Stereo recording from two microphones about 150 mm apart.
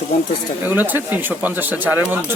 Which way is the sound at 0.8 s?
10° right (ahead or behind).